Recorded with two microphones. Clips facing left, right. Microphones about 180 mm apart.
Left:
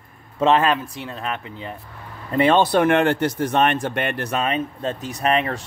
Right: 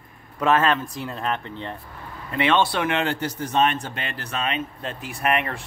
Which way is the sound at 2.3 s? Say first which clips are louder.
Left 5 dB; 40° left (ahead or behind).